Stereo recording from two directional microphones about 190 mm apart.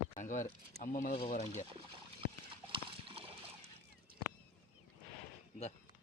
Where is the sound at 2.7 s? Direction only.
30° right (ahead or behind).